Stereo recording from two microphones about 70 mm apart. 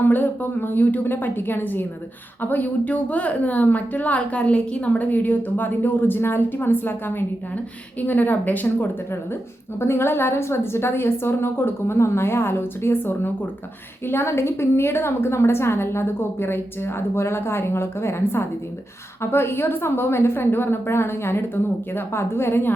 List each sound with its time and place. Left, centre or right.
0.0 s a woman's voice: left